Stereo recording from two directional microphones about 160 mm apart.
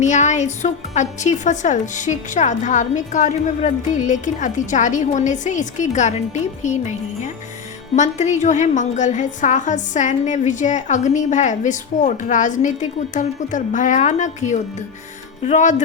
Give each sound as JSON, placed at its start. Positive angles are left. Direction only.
{"t": 0.0, "sound": "a woman's voice", "side_deg": 50}